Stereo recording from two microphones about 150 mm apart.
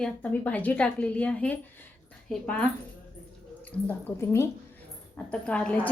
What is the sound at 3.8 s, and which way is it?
A woman's voice, 15° left (ahead or behind).